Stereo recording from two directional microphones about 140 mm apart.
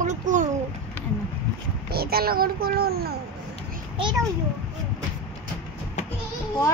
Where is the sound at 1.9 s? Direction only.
90° right.